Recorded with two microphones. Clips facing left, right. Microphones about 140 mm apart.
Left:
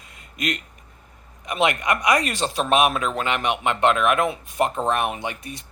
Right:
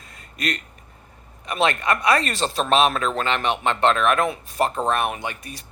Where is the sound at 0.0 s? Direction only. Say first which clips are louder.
Even; 15° left (ahead or behind).